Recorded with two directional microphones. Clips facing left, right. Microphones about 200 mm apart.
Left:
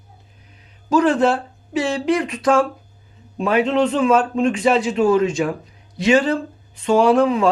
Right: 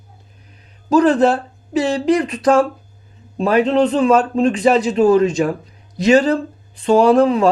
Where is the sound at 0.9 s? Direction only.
35° right (ahead or behind).